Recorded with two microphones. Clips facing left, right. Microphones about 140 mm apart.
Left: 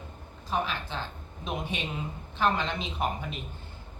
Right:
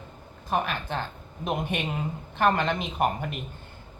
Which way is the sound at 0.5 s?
55° right (ahead or behind).